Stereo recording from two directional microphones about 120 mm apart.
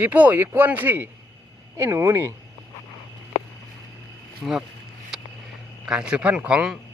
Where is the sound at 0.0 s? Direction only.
15° right (ahead or behind).